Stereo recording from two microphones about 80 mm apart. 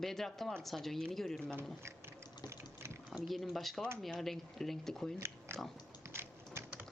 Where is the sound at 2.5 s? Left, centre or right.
Right.